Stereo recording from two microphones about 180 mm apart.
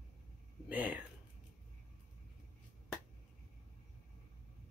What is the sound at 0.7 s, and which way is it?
Speech, 10° right (ahead or behind).